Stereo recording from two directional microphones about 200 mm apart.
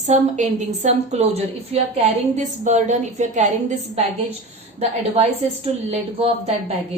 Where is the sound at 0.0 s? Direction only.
35° right (ahead or behind).